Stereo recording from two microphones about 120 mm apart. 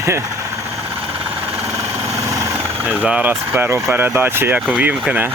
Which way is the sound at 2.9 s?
10° right (ahead or behind).